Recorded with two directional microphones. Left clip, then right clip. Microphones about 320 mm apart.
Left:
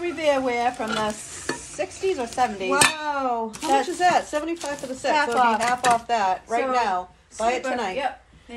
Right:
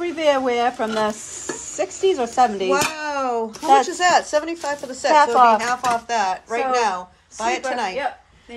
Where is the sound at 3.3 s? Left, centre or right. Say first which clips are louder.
Right 8 dB; right.